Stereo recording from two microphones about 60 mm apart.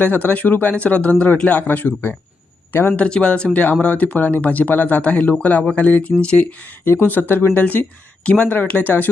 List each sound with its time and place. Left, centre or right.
0.0 s speech: left
2.9 s speech: centre